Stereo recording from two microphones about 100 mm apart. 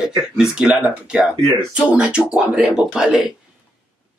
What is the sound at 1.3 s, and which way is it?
Speech, 40° right (ahead or behind).